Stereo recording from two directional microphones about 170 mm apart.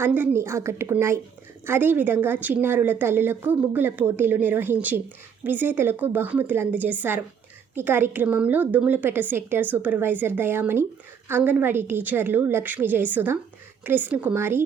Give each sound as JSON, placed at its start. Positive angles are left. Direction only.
{"t": 0.0, "sound": "speech", "side_deg": -10}